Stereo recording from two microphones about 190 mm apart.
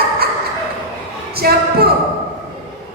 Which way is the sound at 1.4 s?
55° right (ahead or behind).